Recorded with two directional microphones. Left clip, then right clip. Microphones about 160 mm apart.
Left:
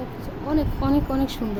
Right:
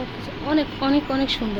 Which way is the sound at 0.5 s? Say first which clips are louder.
Right 2 dB; 15° left (ahead or behind).